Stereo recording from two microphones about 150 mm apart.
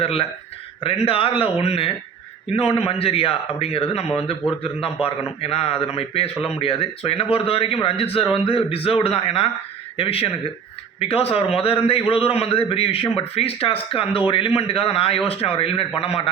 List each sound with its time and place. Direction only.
0.0 s a man's voice: 40° left (ahead or behind)